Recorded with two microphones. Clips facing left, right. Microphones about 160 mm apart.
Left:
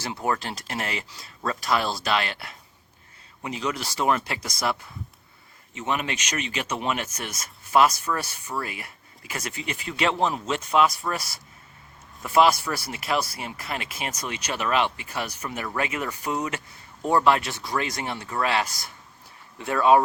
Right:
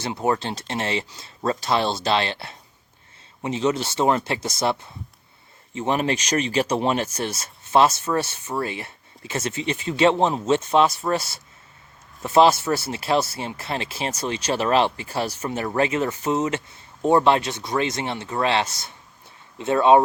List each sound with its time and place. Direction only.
0.0 s speech: 25° right (ahead or behind)